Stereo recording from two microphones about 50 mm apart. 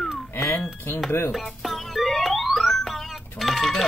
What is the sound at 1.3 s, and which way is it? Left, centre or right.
Music, centre.